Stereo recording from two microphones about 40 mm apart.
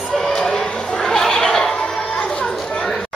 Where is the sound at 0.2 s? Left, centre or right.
Centre.